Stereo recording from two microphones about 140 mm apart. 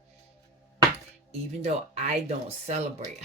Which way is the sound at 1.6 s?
50° right (ahead or behind).